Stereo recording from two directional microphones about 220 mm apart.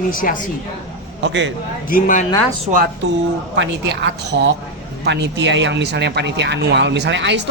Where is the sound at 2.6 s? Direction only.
40° right (ahead or behind).